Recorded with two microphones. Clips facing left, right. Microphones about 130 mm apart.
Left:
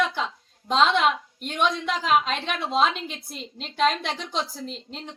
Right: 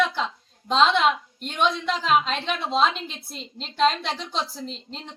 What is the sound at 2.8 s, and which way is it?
Speech, 50° left (ahead or behind).